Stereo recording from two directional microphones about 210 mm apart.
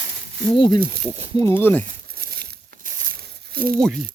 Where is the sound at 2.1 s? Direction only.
45° right (ahead or behind).